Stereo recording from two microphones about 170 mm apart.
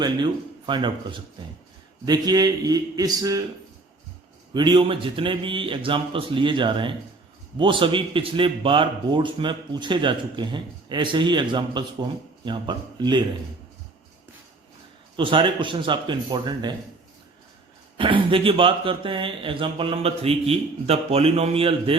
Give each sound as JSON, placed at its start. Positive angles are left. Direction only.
{"t": 0.0, "sound": "speech", "side_deg": -25}
{"t": 4.5, "sound": "speech", "side_deg": -25}
{"t": 15.1, "sound": "speech", "side_deg": -30}
{"t": 17.9, "sound": "speech", "side_deg": -30}